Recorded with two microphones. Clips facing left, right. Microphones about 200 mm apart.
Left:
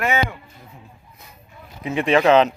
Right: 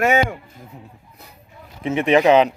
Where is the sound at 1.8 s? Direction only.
20° right (ahead or behind).